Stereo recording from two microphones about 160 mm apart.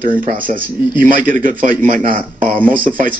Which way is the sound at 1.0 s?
55° right (ahead or behind).